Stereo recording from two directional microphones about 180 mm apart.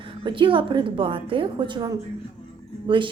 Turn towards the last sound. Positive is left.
turn(degrees=-30)  # may be behind; listen again after turning